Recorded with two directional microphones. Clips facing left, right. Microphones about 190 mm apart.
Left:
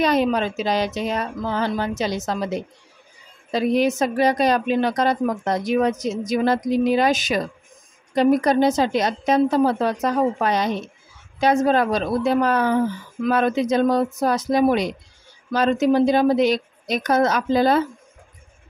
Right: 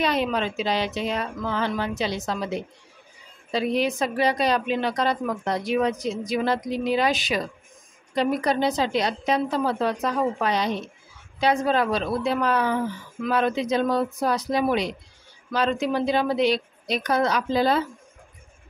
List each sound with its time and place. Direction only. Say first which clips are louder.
0.0 s speech: left 5 dB; 40° left (ahead or behind)